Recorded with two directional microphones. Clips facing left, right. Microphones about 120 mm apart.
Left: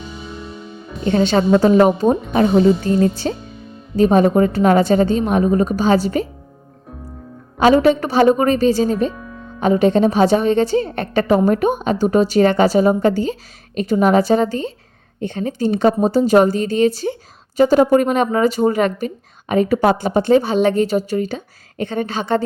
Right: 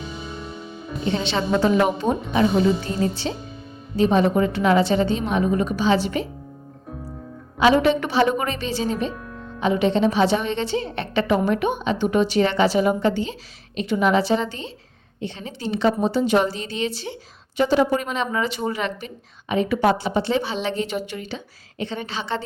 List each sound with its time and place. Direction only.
0.0 s music: centre (ahead or behind)
1.0 s a woman's voice: 45° left (ahead or behind)
7.6 s a woman's voice: 40° left (ahead or behind)
9.1 s music: centre (ahead or behind)
9.6 s speech: 45° left (ahead or behind)